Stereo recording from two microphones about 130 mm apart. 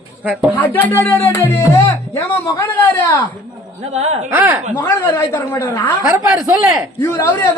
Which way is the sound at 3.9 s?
55° right (ahead or behind).